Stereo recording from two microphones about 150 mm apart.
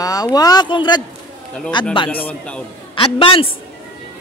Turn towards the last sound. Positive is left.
turn(degrees=35)  # may be behind; listen again after turning